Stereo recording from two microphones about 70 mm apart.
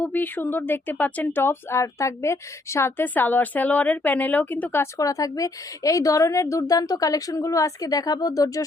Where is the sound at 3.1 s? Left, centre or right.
Left.